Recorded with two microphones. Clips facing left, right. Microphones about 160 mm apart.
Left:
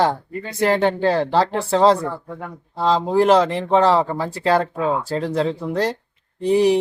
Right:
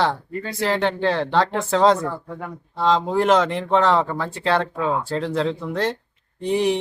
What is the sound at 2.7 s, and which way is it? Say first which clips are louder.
Speech: left 2 dB; 35° left (ahead or behind).